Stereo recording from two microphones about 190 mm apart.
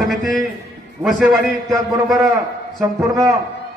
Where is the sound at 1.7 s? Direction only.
20° right (ahead or behind).